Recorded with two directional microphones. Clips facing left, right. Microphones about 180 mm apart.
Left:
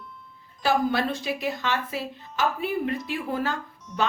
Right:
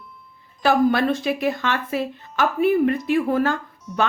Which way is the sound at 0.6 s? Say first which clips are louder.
Right 6 dB; 55° right (ahead or behind).